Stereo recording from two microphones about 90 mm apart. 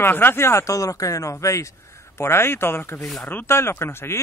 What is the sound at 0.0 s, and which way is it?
Speech, 25° left (ahead or behind).